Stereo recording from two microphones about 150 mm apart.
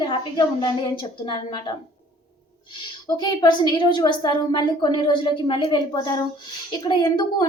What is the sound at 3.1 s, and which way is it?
A woman's voice, 30° left (ahead or behind).